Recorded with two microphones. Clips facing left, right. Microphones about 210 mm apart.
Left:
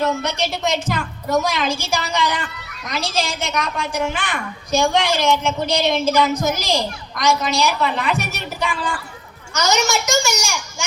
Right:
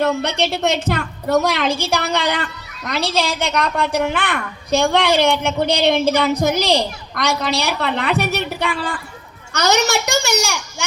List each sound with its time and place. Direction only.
0.0 s a woman's voice: 60° right (ahead or behind)